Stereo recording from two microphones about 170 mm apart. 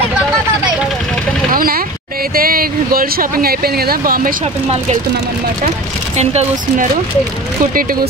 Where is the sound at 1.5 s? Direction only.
60° right (ahead or behind).